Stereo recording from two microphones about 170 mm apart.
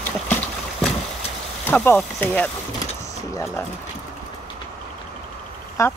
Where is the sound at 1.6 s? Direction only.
10° left (ahead or behind).